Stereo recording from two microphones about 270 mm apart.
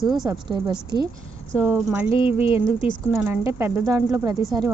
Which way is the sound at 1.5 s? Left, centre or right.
Centre.